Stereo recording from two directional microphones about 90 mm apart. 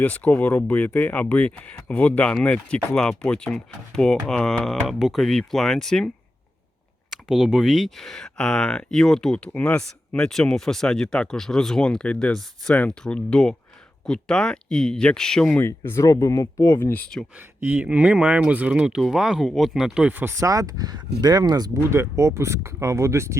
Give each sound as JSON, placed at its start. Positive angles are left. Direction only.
{"t": 0.0, "sound": "speech", "side_deg": 15}
{"t": 7.3, "sound": "speech", "side_deg": -5}
{"t": 15.5, "sound": "speech", "side_deg": 25}
{"t": 17.3, "sound": "speech", "side_deg": -20}
{"t": 20.4, "sound": "speech", "side_deg": -40}
{"t": 21.8, "sound": "speech", "side_deg": -30}